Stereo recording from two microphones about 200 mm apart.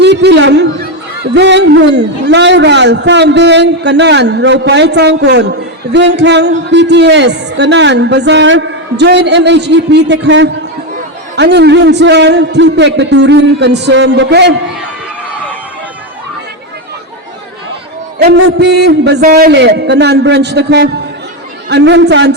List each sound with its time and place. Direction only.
0.0 s a sound: 60° right (ahead or behind)
1.3 s a man's voice: 60° right (ahead or behind)
18.3 s a man's voice: 65° right (ahead or behind)